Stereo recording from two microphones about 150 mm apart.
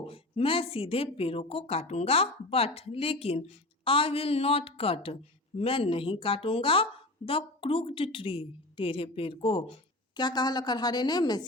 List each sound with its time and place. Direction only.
0.0 s a woman's voice: 40° left (ahead or behind)